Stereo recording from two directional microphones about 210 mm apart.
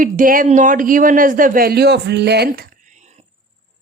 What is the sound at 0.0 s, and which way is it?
A woman's voice, 40° right (ahead or behind).